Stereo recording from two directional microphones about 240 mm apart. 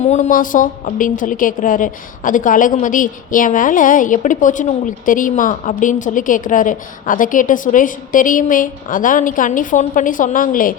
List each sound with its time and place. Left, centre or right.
0.0 s a woman's voice: left